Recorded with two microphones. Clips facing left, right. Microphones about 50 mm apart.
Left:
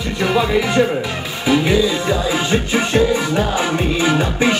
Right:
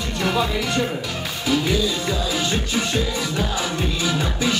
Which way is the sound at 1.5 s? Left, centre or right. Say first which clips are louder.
Left 6 dB; left.